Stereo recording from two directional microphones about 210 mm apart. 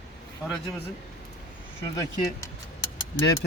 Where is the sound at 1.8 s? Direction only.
15° left (ahead or behind).